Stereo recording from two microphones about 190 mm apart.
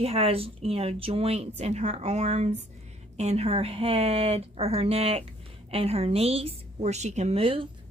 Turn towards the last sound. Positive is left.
turn(degrees=-30)  # may be behind; listen again after turning